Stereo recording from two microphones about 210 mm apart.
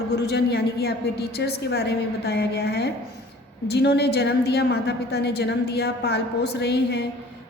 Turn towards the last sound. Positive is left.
turn(degrees=50)  # may be behind; listen again after turning